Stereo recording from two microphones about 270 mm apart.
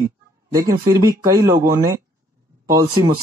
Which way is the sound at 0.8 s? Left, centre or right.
Centre.